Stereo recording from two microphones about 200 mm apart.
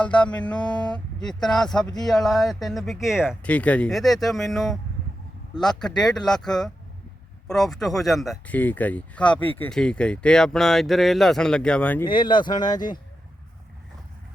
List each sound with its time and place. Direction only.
0.0 s speech: 5° left (ahead or behind)
12.0 s speech: 25° left (ahead or behind)